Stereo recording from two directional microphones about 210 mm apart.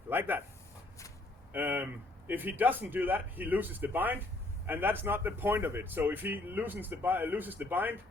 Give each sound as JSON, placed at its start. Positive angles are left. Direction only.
{"t": 0.1, "sound": "speech", "side_deg": -10}
{"t": 1.5, "sound": "speech", "side_deg": -10}